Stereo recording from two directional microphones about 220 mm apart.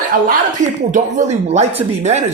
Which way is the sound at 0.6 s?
35° right (ahead or behind).